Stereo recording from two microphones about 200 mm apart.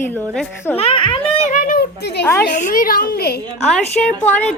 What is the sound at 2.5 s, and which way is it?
Speech, 45° left (ahead or behind).